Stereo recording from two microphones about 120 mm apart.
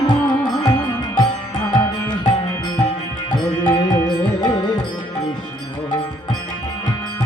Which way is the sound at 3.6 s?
35° left (ahead or behind).